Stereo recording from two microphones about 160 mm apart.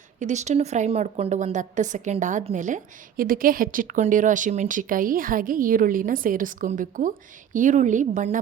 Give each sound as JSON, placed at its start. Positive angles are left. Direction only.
{"t": 0.2, "sound": "a woman's voice", "side_deg": -45}